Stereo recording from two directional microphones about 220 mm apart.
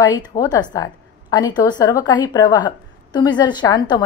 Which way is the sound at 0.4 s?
15° left (ahead or behind).